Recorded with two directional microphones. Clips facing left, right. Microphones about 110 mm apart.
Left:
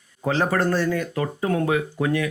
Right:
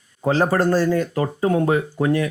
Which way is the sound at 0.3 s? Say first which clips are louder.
Right 4 dB; 35° right (ahead or behind).